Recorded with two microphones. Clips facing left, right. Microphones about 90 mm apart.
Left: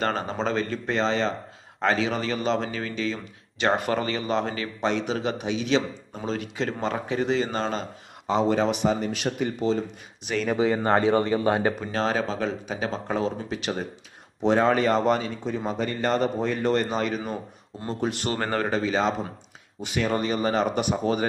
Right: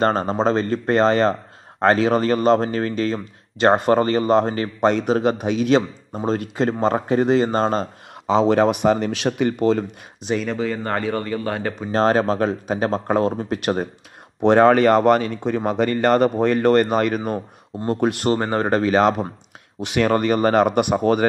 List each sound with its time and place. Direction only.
0.0 s speech: 40° right (ahead or behind)
8.4 s speech: 75° right (ahead or behind)
8.6 s speech: 60° right (ahead or behind)
10.5 s speech: 20° left (ahead or behind)
11.9 s speech: 45° right (ahead or behind)
14.4 s speech: 65° right (ahead or behind)
18.4 s speech: 25° right (ahead or behind)
18.7 s speech: 60° right (ahead or behind)